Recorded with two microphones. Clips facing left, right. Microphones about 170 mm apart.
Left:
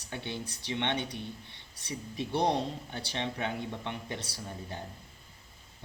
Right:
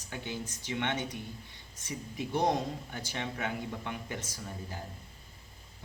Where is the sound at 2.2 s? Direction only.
10° right (ahead or behind).